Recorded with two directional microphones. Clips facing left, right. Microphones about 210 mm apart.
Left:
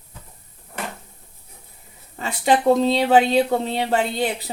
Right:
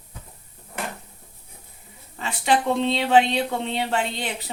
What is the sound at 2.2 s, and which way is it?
Speech, 40° left (ahead or behind).